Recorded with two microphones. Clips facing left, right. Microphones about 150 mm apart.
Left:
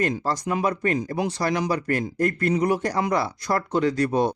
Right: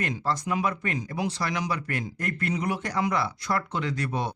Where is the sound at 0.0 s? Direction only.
40° left (ahead or behind).